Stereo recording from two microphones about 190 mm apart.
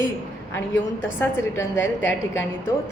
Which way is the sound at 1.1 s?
10° left (ahead or behind).